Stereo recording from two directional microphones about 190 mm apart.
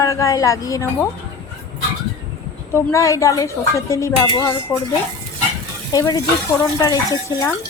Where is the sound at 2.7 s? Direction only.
15° left (ahead or behind).